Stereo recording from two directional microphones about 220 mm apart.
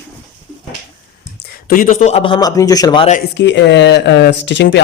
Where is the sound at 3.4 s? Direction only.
50° left (ahead or behind).